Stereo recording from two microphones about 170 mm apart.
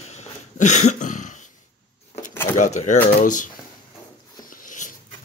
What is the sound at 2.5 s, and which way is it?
Speech, 45° left (ahead or behind).